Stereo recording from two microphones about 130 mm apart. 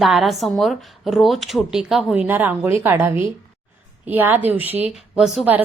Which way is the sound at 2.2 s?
15° right (ahead or behind).